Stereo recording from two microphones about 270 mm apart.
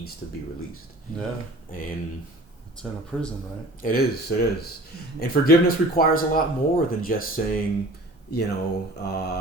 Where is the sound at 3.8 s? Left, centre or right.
Left.